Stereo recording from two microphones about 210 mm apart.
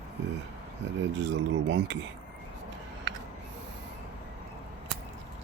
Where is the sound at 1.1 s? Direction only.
55° right (ahead or behind).